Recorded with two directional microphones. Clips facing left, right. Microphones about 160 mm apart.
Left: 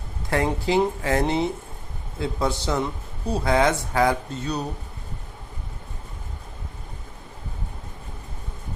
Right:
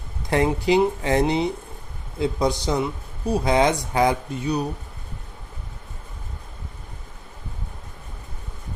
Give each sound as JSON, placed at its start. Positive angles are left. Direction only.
{"t": 0.3, "sound": "a man's voice", "side_deg": -20}